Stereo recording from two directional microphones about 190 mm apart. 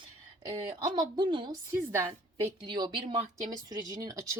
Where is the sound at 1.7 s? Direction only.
15° right (ahead or behind).